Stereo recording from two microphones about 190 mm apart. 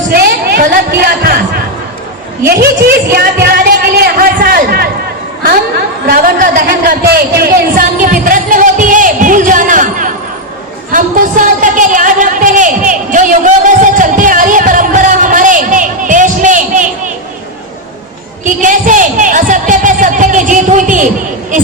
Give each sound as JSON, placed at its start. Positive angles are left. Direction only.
{"t": 0.1, "sound": "a woman's voice", "side_deg": -55}
{"t": 3.4, "sound": "a sound", "side_deg": -55}
{"t": 6.1, "sound": "speech", "side_deg": -50}
{"t": 7.1, "sound": "music", "side_deg": -50}
{"t": 10.9, "sound": "a sound", "side_deg": -45}
{"t": 18.4, "sound": "speech", "side_deg": -40}